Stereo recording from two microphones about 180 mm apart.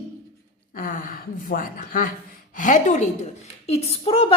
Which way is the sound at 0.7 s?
50° left (ahead or behind).